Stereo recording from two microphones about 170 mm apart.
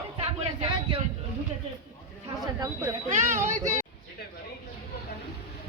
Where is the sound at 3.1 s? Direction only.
45° right (ahead or behind).